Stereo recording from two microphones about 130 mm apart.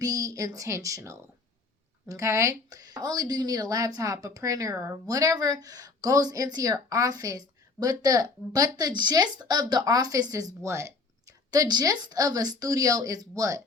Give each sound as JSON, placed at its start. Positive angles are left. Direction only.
{"t": 0.0, "sound": "speech", "side_deg": -25}